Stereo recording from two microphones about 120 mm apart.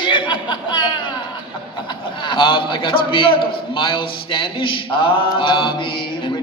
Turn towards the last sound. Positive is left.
turn(degrees=45)  # may be behind; listen again after turning